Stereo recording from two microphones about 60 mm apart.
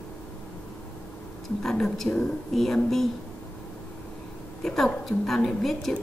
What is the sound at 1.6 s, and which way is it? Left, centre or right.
A woman's voice, centre.